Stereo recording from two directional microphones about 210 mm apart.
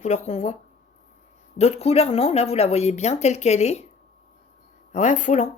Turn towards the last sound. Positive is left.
turn(degrees=35)  # may be behind; listen again after turning